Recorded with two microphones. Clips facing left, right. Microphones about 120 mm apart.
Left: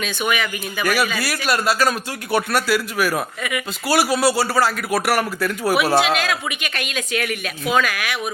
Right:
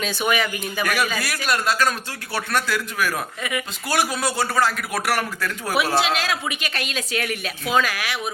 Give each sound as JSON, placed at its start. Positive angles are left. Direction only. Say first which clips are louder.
{"t": 0.0, "sound": "speech", "louder": "even", "side_deg": -35}
{"t": 0.8, "sound": "a man's voice", "louder": "left 3 dB", "side_deg": 5}
{"t": 6.1, "sound": "speech", "louder": "left 2 dB", "side_deg": -30}